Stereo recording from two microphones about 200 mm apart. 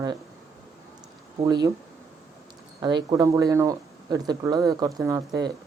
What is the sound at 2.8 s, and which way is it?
Speech, 20° right (ahead or behind).